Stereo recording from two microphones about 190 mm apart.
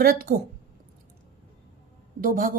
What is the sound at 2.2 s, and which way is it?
Speech, 45° right (ahead or behind).